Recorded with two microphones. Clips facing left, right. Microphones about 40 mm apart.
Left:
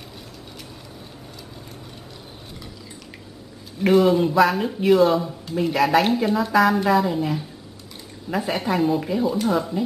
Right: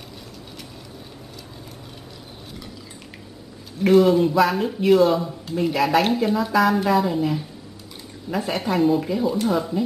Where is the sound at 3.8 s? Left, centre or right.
Centre.